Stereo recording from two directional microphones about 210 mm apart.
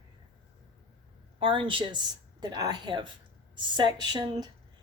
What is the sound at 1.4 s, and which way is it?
A woman's voice, 25° right (ahead or behind).